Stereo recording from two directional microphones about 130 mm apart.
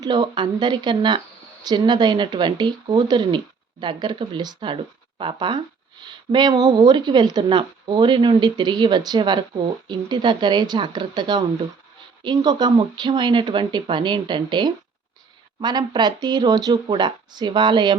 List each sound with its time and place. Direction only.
0.0 s speech: 35° right (ahead or behind)